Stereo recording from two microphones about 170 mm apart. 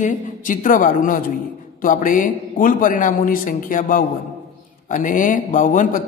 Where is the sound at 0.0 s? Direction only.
50° left (ahead or behind).